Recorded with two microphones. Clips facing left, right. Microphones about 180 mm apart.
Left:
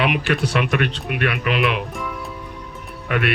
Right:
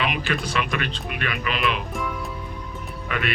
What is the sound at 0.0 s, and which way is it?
Speech, 65° left (ahead or behind).